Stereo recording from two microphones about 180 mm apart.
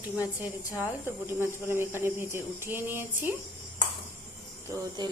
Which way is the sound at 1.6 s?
15° right (ahead or behind).